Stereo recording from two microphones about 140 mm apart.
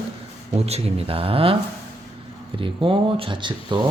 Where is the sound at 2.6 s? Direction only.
40° right (ahead or behind).